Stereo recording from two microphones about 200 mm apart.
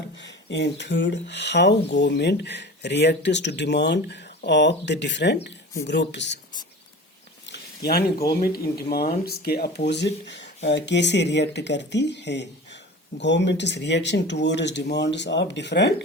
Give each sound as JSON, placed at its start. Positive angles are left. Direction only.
{"t": 0.2, "sound": "speech", "side_deg": 60}
{"t": 7.4, "sound": "speech", "side_deg": 55}